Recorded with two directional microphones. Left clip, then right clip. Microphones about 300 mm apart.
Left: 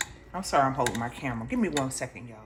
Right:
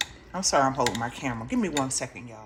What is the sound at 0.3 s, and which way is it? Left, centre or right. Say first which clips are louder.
Speech: right 1 dB; centre.